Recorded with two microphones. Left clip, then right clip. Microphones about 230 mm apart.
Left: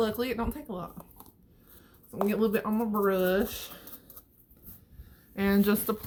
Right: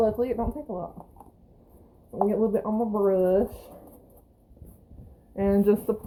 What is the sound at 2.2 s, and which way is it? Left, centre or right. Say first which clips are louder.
Speech: right 4 dB; left.